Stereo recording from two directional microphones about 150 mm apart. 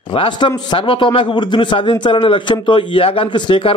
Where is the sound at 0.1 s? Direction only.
35° left (ahead or behind).